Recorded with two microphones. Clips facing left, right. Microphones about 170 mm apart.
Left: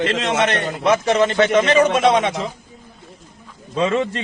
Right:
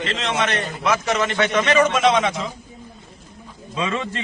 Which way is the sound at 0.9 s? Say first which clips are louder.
Left 5 dB; 30° left (ahead or behind).